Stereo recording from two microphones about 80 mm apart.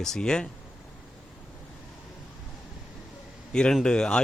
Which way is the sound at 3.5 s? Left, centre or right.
Centre.